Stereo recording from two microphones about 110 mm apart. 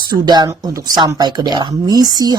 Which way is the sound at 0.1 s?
40° right (ahead or behind).